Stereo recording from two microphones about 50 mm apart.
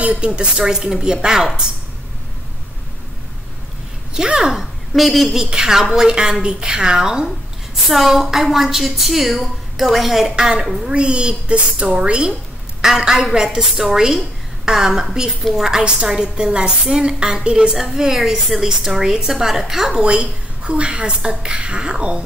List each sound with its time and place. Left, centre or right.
0.0 s a woman's voice: right
4.1 s a woman's voice: centre
5.4 s a woman's voice: centre
7.2 s a woman's voice: centre
10.9 s a woman's voice: right
20.1 s a woman's voice: centre